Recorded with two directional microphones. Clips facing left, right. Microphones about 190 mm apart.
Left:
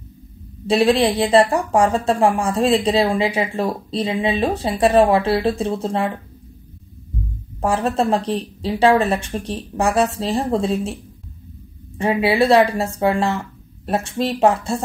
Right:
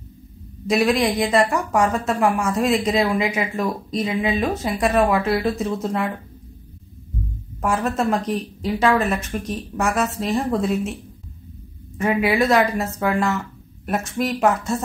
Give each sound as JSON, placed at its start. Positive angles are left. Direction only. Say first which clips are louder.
{"t": 0.7, "sound": "a woman's voice", "louder": "left 3 dB", "side_deg": 30}
{"t": 7.6, "sound": "a woman's voice", "louder": "left 2 dB", "side_deg": 30}
{"t": 12.0, "sound": "a woman's voice", "louder": "left 2 dB", "side_deg": 30}